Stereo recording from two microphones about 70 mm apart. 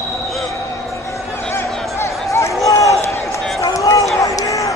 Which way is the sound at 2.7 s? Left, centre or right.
Left.